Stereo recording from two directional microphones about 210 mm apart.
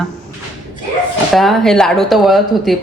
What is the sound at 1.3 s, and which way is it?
Speech, centre (ahead or behind).